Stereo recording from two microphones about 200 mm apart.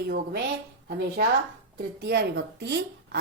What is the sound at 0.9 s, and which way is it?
A woman's voice, 45° right (ahead or behind).